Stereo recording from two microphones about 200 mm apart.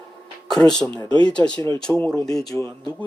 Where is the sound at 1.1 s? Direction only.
25° right (ahead or behind).